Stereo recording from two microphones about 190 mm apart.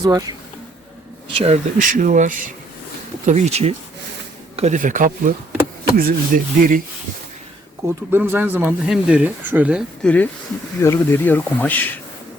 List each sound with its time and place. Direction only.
0.0 s speech: 20° right (ahead or behind)
1.4 s speech: 40° right (ahead or behind)
7.9 s speech: 10° right (ahead or behind)
10.8 s speech: 15° left (ahead or behind)